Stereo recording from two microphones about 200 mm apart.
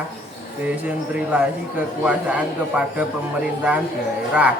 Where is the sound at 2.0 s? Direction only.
5° right (ahead or behind).